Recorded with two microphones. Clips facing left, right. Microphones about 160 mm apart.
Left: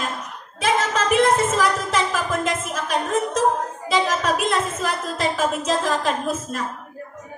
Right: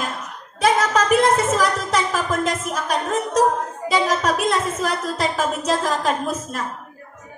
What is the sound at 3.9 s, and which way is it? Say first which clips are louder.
A woman's voice: right 1 dB; 40° right (ahead or behind).